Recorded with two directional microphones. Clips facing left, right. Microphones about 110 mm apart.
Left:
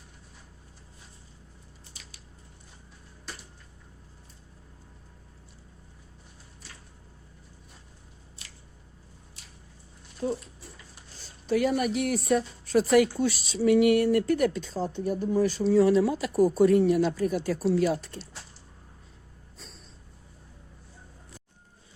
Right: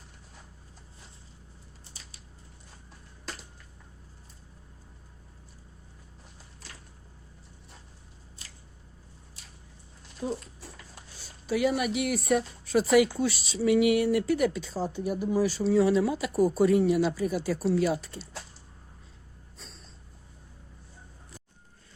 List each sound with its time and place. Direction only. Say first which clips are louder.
10.2 s speech: left 3 dB; 15° right (ahead or behind)
19.5 s snort: left 1 dB; centre (ahead or behind)